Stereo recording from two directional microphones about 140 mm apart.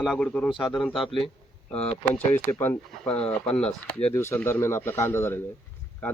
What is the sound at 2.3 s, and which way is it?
Speech, 15° left (ahead or behind).